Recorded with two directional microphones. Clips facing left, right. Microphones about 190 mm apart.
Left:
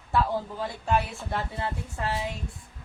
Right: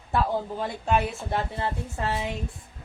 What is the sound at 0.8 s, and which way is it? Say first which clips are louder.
A woman's voice: right 2 dB; 20° right (ahead or behind).